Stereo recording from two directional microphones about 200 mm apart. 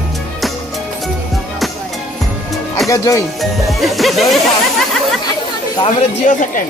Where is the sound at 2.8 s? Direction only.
15° left (ahead or behind).